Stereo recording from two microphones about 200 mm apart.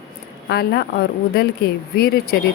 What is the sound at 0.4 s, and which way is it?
A woman's voice, 55° left (ahead or behind).